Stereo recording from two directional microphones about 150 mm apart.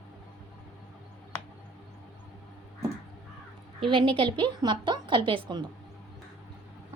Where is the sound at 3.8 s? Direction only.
35° right (ahead or behind).